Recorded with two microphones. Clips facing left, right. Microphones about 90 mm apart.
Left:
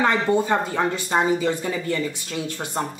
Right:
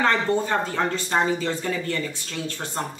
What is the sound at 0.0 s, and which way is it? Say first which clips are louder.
Speech: left 2 dB; 15° left (ahead or behind).